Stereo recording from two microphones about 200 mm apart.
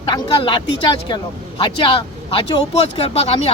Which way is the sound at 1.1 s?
25° left (ahead or behind).